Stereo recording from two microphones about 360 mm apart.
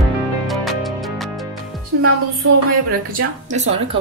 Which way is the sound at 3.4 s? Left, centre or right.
Centre.